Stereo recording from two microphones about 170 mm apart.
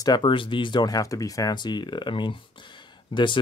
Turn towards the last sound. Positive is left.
turn(degrees=30)  # may be behind; listen again after turning